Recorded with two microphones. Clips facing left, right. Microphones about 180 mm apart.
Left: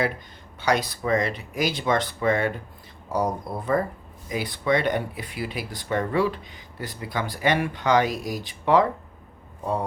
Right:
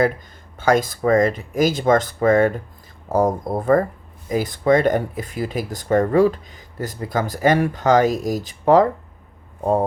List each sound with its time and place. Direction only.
0.6 s speech: 45° right (ahead or behind)